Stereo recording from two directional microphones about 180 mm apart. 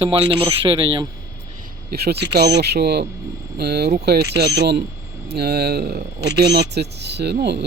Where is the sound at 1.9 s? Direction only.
65° right (ahead or behind).